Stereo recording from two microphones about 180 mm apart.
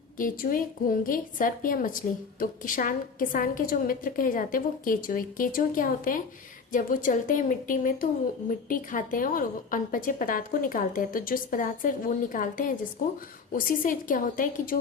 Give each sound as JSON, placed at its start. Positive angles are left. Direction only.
{"t": 0.2, "sound": "a woman's voice", "side_deg": 50}